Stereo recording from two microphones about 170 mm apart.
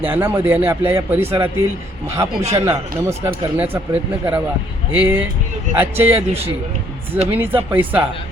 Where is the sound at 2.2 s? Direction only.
20° right (ahead or behind).